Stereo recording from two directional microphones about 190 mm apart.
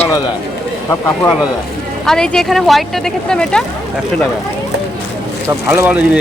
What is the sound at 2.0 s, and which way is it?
Speech, 5° left (ahead or behind).